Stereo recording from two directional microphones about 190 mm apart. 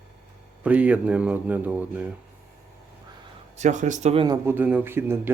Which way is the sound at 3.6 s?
40° right (ahead or behind).